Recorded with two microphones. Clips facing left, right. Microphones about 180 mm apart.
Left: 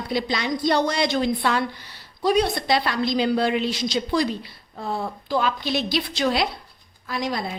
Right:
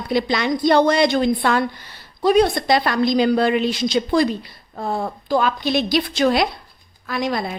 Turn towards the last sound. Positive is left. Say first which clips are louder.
# right 4 dB
turn(degrees=-55)  # may be behind; listen again after turning